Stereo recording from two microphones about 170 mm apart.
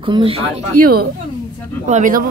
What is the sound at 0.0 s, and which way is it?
Speech, 30° right (ahead or behind).